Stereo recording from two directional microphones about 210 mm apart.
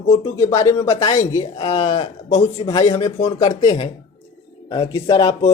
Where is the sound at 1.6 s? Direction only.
30° left (ahead or behind).